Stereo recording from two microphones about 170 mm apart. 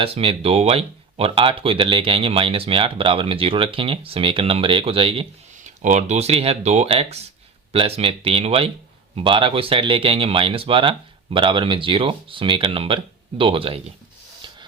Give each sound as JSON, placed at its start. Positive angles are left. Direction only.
{"t": 0.0, "sound": "speech", "side_deg": -35}
{"t": 5.6, "sound": "speech", "side_deg": -45}